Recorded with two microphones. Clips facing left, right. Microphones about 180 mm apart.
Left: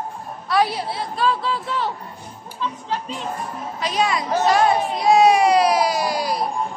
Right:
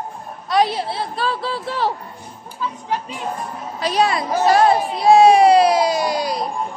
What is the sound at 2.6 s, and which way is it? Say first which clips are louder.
Music: right 2 dB; 10° right (ahead or behind).